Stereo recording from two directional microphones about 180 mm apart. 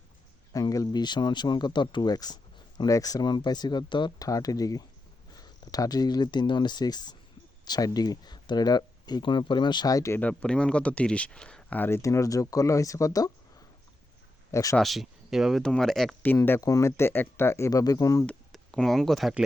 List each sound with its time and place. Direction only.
0.5 s speech: 20° left (ahead or behind)
14.5 s speech: 15° left (ahead or behind)
14.8 s speech: centre (ahead or behind); by 18.3 s 20° left (ahead or behind)
18.3 s speech: 5° left (ahead or behind)